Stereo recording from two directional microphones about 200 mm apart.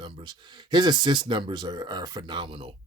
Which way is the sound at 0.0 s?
20° right (ahead or behind).